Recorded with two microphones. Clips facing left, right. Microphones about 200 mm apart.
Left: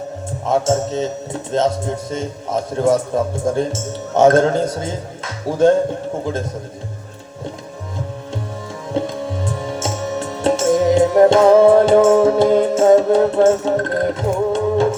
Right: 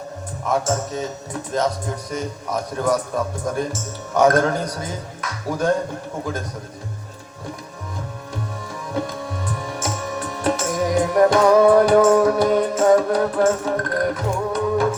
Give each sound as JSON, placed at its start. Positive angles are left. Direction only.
{"t": 0.4, "sound": "speech", "side_deg": 25}
{"t": 8.9, "sound": "music", "side_deg": 25}